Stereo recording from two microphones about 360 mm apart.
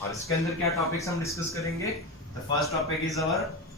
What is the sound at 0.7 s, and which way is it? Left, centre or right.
Speech, centre.